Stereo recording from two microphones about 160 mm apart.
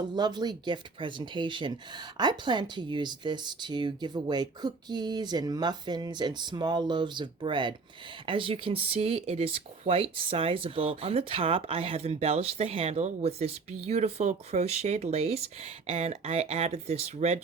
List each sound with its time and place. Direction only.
0.2 s speech: 25° right (ahead or behind); by 17.4 s 45° right (ahead or behind)